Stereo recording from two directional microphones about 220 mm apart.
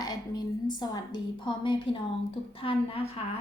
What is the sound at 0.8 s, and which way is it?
A woman's voice, 20° left (ahead or behind).